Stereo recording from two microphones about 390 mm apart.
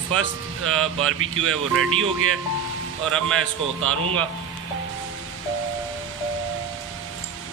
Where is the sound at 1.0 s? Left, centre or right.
Right.